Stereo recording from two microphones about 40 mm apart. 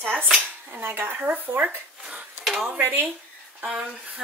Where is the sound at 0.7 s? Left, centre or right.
Right.